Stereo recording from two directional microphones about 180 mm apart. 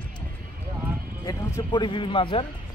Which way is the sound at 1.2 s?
20° left (ahead or behind).